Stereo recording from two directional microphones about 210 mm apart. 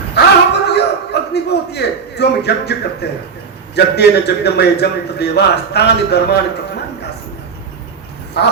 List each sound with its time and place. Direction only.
0.1 s a sound: 50° left (ahead or behind)
3.9 s a man's voice: 50° left (ahead or behind)
8.4 s a man's voice: 50° left (ahead or behind)